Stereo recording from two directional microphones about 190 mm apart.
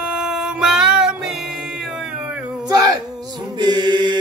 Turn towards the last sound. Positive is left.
turn(degrees=-25)  # may be behind; listen again after turning